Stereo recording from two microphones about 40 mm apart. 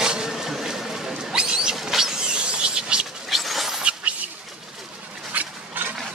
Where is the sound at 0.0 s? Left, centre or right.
Centre.